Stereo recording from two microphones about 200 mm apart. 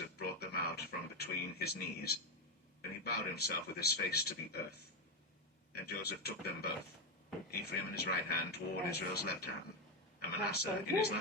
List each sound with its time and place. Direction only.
0.2 s a sound: 50° left (ahead or behind)
3.0 s speech: 50° left (ahead or behind)
5.7 s speech: 50° left (ahead or behind)